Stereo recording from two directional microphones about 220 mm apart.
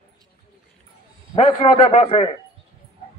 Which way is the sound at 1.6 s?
30° left (ahead or behind).